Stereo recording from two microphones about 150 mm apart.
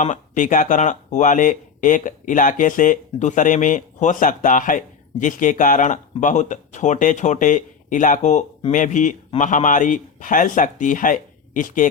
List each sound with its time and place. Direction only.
0.0 s speech: 55° left (ahead or behind)